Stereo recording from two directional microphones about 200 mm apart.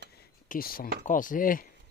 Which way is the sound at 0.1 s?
45° left (ahead or behind).